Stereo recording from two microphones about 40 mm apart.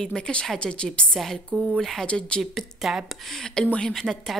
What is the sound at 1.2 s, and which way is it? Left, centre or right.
Speech, centre.